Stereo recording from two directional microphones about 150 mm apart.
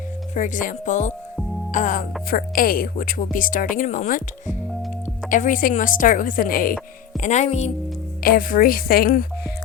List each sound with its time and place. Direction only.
0.3 s speech: 60° left (ahead or behind)
2.3 s speech: 75° left (ahead or behind)
7.2 s speech: 50° left (ahead or behind)
8.2 s a woman's voice: 70° left (ahead or behind)